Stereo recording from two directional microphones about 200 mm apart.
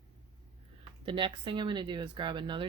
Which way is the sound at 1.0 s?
25° right (ahead or behind).